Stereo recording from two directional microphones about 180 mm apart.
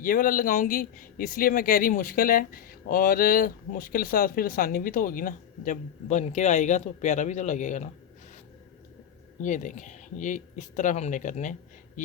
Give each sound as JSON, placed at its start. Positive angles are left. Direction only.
{"t": 0.0, "sound": "speech", "side_deg": 50}
{"t": 9.4, "sound": "speech", "side_deg": 45}